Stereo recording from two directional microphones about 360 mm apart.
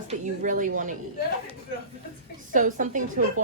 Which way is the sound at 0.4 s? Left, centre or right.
Right.